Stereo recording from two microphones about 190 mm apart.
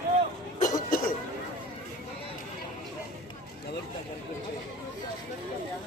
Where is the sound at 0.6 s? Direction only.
45° left (ahead or behind).